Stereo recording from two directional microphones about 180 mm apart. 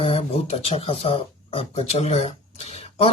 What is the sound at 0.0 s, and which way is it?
Speech, 35° left (ahead or behind).